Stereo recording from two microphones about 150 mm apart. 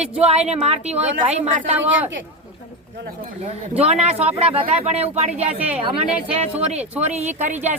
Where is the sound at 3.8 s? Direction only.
45° right (ahead or behind).